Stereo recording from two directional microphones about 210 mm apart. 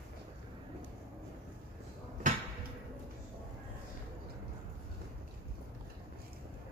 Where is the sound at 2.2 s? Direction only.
40° right (ahead or behind).